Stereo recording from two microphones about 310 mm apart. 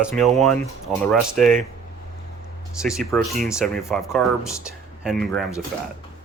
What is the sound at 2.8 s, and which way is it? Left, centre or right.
Speech, centre.